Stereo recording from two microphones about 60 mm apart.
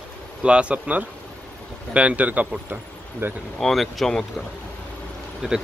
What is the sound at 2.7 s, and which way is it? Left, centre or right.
Speech, right.